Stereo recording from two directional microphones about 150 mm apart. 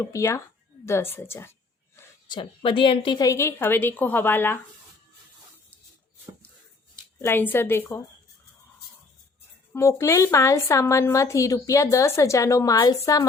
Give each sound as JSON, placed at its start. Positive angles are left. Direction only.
{"t": 0.0, "sound": "a woman's voice", "side_deg": 20}
{"t": 2.3, "sound": "a woman's voice", "side_deg": 35}
{"t": 3.2, "sound": "a woman's voice", "side_deg": 20}
{"t": 7.2, "sound": "a woman's voice", "side_deg": 15}
{"t": 9.7, "sound": "a woman's voice", "side_deg": 20}